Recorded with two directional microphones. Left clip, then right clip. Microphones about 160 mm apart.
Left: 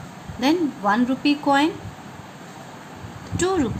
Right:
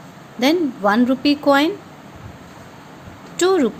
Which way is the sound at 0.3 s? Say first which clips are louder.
Right 3 dB; 40° right (ahead or behind).